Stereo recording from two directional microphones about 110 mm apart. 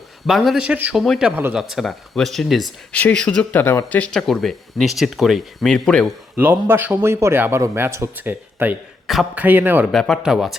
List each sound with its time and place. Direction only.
0.3 s a man's voice: centre (ahead or behind)
0.9 s speech: centre (ahead or behind)
2.9 s speech: 10° left (ahead or behind)
4.2 s speech: centre (ahead or behind)
6.3 s a man's voice: 20° right (ahead or behind)
9.9 s speech: centre (ahead or behind)